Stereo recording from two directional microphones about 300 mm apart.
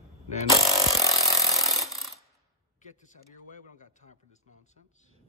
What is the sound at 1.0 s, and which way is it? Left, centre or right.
Chainsaw, centre.